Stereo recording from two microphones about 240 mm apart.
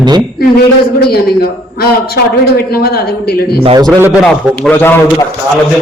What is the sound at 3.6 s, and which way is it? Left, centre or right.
Speech, right.